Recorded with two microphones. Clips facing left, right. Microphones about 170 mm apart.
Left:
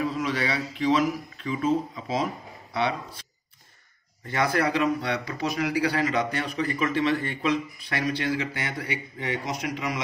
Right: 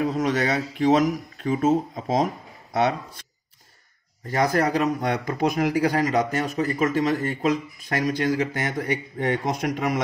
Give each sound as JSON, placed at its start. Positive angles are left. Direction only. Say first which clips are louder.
{"t": 0.0, "sound": "a man's voice", "louder": "right 4 dB", "side_deg": -45}
{"t": 4.3, "sound": "a man's voice", "louder": "right 3 dB", "side_deg": -40}